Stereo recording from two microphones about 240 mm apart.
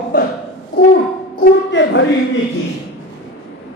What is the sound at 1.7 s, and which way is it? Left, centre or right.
Speech, left.